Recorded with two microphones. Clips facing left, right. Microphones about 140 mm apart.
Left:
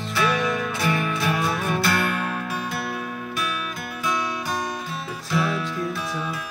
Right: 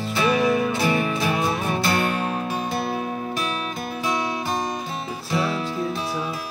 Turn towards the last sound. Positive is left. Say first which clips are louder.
# even
turn(degrees=-35)  # may be behind; listen again after turning